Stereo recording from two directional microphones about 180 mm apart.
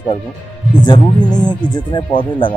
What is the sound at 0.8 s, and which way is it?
Speech, 25° left (ahead or behind).